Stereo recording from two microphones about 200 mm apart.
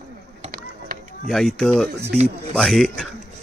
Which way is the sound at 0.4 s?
45° right (ahead or behind).